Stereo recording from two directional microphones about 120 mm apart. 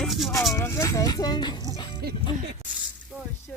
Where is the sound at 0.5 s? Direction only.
25° left (ahead or behind).